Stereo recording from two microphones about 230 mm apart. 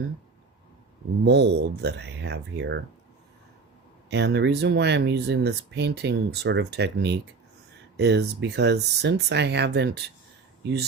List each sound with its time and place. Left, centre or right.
1.2 s speech: right
4.1 s speech: right